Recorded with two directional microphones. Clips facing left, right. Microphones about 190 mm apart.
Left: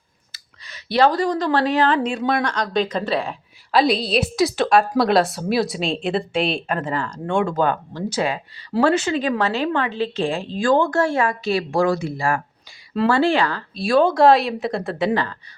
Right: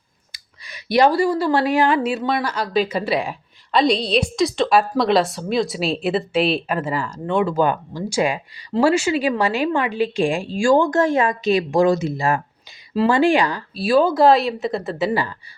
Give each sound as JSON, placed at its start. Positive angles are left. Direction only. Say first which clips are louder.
{"t": 0.3, "sound": "speech", "louder": "right 2 dB", "side_deg": -15}
{"t": 3.7, "sound": "a woman's voice", "louder": "even", "side_deg": 5}